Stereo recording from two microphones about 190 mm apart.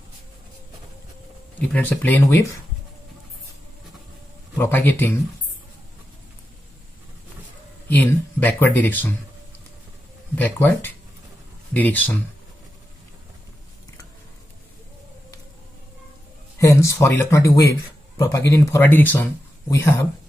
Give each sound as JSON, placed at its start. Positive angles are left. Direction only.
{"t": 1.7, "sound": "speech", "side_deg": 10}
{"t": 4.6, "sound": "speech", "side_deg": 10}
{"t": 7.9, "sound": "speech", "side_deg": 10}
{"t": 10.3, "sound": "speech", "side_deg": 10}
{"t": 16.5, "sound": "speech", "side_deg": 15}